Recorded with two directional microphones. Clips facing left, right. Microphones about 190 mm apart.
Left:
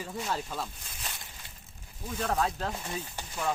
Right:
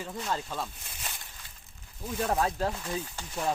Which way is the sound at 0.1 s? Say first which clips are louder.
Even; 5° left (ahead or behind).